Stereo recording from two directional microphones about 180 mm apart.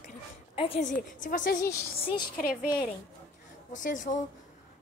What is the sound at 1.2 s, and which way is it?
Speech, 50° left (ahead or behind).